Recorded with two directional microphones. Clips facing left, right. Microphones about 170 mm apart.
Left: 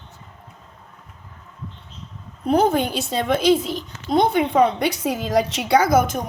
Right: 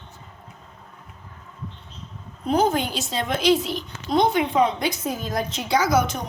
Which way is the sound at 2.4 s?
60° left (ahead or behind).